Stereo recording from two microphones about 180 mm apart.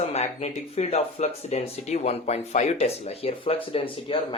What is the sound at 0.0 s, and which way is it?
Speech, 35° left (ahead or behind).